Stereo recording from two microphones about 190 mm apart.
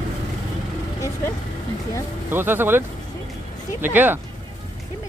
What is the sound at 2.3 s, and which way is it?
Speech, 10° right (ahead or behind).